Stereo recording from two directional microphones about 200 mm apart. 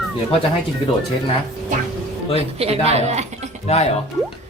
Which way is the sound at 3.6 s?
30° left (ahead or behind).